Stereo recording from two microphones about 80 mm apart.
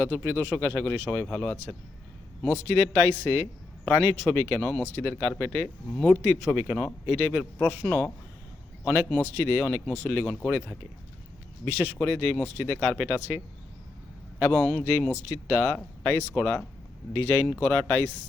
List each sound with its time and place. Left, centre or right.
0.0 s a man's voice: left